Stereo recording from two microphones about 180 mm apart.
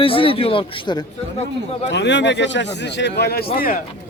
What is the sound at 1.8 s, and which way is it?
A man's voice, 75° left (ahead or behind).